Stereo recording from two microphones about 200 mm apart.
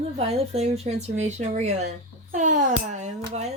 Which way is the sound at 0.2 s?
30° right (ahead or behind).